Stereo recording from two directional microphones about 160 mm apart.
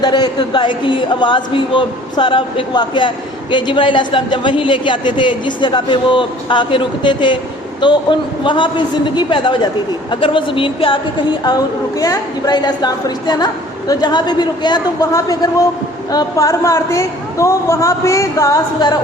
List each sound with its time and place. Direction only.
0.0 s a woman's voice: 25° left (ahead or behind)